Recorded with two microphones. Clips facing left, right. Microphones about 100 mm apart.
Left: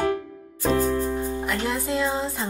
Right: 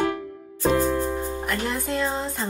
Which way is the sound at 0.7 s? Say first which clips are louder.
Right 1 dB; 45° right (ahead or behind).